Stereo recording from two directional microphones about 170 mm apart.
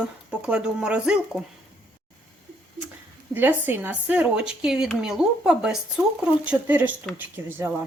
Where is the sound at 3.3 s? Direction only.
10° right (ahead or behind).